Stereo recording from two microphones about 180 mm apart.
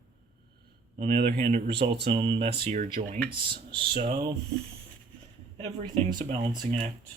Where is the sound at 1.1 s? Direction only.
60° right (ahead or behind).